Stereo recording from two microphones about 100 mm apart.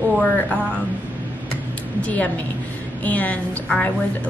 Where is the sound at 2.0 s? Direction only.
15° left (ahead or behind).